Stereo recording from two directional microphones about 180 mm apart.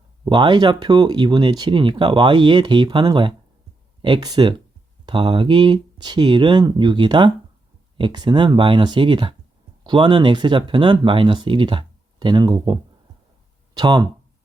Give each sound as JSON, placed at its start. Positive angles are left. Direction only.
{"t": 0.3, "sound": "speech", "side_deg": -25}